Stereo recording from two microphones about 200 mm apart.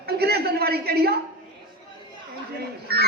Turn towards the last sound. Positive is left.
turn(degrees=-50)  # may be behind; listen again after turning